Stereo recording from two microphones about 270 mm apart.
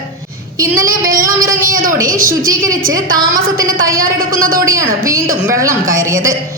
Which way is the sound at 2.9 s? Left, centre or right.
Right.